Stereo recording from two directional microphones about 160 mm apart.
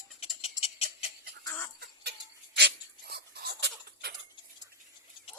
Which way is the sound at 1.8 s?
90° right.